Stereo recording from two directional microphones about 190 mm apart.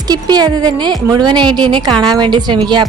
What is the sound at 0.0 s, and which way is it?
Speech, 20° right (ahead or behind).